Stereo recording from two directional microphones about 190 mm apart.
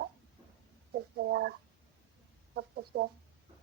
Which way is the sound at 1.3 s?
60° right (ahead or behind).